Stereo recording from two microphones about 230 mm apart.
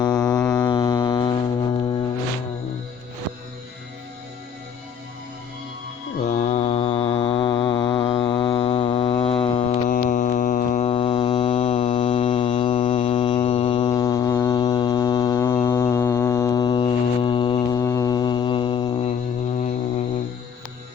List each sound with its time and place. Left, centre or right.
0.1 s a sound: centre
0.4 s music: centre
6.2 s mantra: left